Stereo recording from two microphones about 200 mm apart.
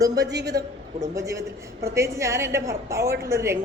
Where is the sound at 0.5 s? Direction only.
55° right (ahead or behind).